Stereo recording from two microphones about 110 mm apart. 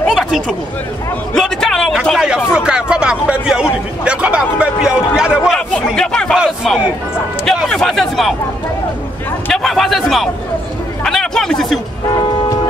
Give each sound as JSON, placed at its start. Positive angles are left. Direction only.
{"t": 0.1, "sound": "a sound", "side_deg": 0}
{"t": 1.3, "sound": "a man's voice", "side_deg": 5}
{"t": 2.1, "sound": "a man's voice", "side_deg": -10}
{"t": 6.3, "sound": "crowd", "side_deg": -5}
{"t": 7.5, "sound": "speech", "side_deg": 0}
{"t": 9.5, "sound": "speech", "side_deg": 0}
{"t": 11.1, "sound": "a sound", "side_deg": 5}